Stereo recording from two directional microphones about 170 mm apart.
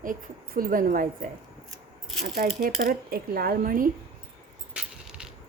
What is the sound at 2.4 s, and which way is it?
A woman's voice, 55° right (ahead or behind).